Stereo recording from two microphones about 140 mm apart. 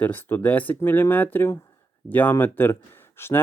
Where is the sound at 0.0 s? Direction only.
15° left (ahead or behind).